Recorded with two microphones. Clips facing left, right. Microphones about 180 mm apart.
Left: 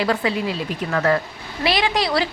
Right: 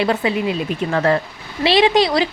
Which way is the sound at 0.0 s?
20° right (ahead or behind).